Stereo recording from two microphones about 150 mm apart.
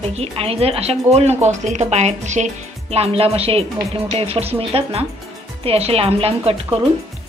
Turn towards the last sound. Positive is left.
turn(degrees=-40)  # may be behind; listen again after turning